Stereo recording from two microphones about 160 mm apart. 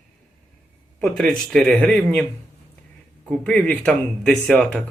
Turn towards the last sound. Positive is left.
turn(degrees=5)  # may be behind; listen again after turning